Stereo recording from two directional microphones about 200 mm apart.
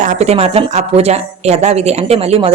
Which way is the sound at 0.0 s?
35° right (ahead or behind).